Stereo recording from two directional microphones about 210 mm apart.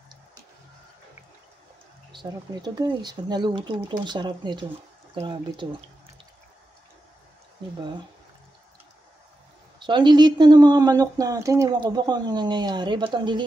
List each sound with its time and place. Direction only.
2.1 s speech: 20° right (ahead or behind)
9.8 s speech: 20° right (ahead or behind)